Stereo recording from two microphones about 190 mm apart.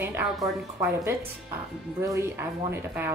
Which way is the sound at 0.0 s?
15° right (ahead or behind).